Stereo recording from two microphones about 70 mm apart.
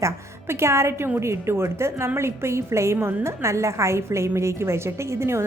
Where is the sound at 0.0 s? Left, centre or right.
Right.